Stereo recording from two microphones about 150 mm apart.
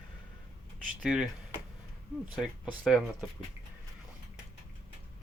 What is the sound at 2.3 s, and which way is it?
Speech, 5° right (ahead or behind).